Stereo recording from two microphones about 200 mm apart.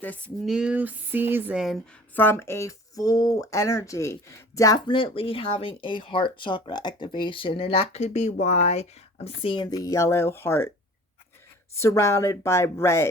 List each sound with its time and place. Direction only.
0.0 s speech: 10° left (ahead or behind)
0.5 s speech: 5° right (ahead or behind); by 10.7 s 10° left (ahead or behind)
11.7 s speech: 15° left (ahead or behind)